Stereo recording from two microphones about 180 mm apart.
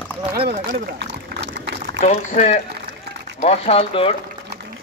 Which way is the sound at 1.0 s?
75° right (ahead or behind).